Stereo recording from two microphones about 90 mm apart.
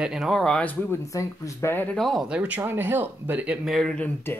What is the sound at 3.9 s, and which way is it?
Speech, 15° left (ahead or behind).